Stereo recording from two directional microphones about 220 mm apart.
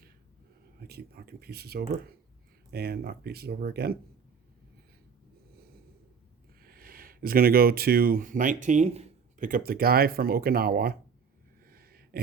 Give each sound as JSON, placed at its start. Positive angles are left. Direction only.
{"t": 0.8, "sound": "speech", "side_deg": -45}
{"t": 6.6, "sound": "speech", "side_deg": -40}
{"t": 11.6, "sound": "a sound", "side_deg": -45}